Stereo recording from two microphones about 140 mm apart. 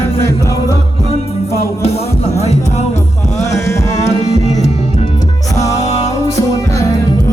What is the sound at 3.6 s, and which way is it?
Music, 20° left (ahead or behind).